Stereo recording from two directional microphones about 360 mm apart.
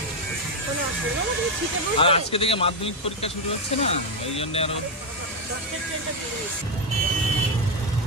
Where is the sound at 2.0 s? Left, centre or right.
Centre.